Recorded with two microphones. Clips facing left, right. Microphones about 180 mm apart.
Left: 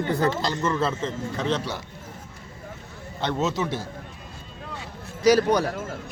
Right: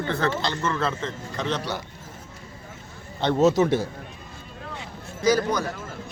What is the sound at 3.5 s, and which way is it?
Speech, 45° right (ahead or behind).